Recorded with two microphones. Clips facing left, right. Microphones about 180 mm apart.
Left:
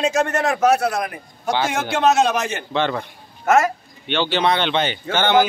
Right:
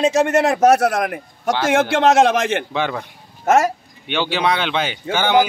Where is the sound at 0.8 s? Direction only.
80° right.